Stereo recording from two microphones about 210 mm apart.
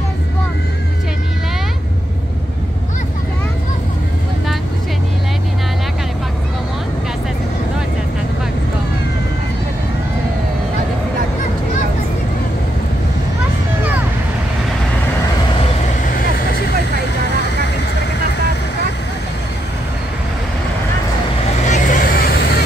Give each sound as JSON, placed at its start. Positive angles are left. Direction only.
{"t": 21.6, "sound": "vehicle", "side_deg": 35}